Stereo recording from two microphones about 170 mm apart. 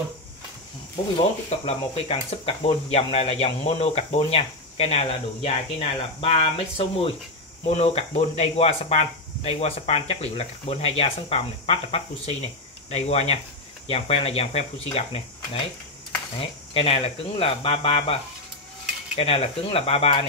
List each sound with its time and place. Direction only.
1.7 s speech: 35° left (ahead or behind)
19.1 s speech: 35° left (ahead or behind)